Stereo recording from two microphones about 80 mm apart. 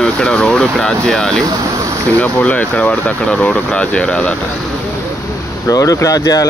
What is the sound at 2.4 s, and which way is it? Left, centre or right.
Speech, centre.